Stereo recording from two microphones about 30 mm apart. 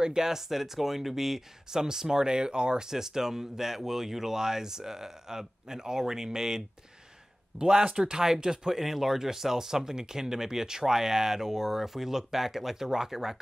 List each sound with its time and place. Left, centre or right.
0.0 s speech: right